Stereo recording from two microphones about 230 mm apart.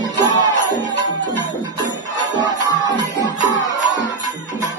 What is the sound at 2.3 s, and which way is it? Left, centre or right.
Music, centre.